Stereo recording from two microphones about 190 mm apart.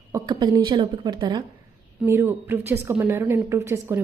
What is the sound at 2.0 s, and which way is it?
A woman's voice, 10° right (ahead or behind).